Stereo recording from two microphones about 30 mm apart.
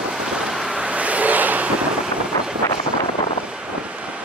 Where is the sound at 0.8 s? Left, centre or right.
Right.